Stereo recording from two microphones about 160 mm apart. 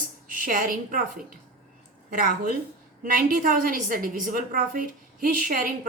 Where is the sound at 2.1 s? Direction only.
65° right (ahead or behind).